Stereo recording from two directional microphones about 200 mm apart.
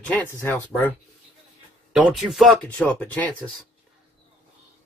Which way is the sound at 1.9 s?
5° right (ahead or behind).